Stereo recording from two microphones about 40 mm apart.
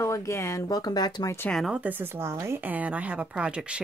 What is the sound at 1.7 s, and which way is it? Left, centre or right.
Speech, right.